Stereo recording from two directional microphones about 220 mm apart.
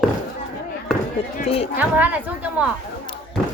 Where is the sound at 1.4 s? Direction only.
25° left (ahead or behind).